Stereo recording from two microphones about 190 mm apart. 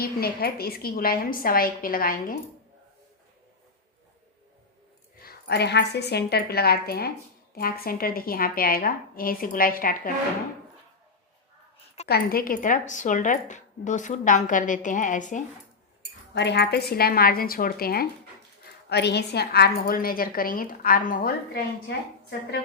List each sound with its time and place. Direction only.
0.0 s a woman's voice: 55° left (ahead or behind)
5.2 s a woman's voice: 55° left (ahead or behind)
12.0 s a woman's voice: 55° left (ahead or behind)
16.3 s a woman's voice: 65° left (ahead or behind)